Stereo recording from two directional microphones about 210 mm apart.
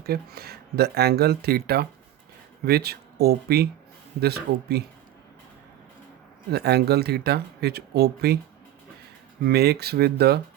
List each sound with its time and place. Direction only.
0.0 s speech: 45° right (ahead or behind)
6.5 s speech: 50° right (ahead or behind)
9.4 s speech: 50° right (ahead or behind)